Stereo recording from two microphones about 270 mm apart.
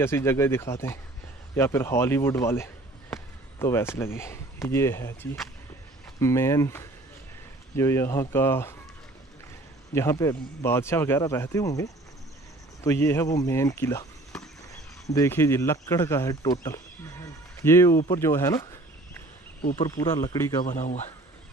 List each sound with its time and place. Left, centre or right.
0.0 s speech: centre
9.9 s speech: centre
18.0 s a sound: centre
19.7 s speech: centre
20.6 s a man's voice: left